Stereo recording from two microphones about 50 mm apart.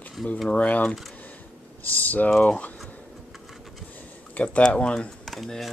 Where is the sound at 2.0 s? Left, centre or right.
Left.